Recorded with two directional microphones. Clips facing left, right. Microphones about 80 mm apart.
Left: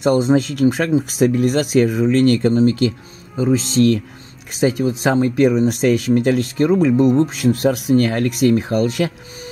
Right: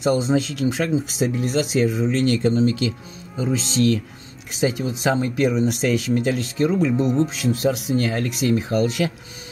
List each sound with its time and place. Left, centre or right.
0.0 s speech: left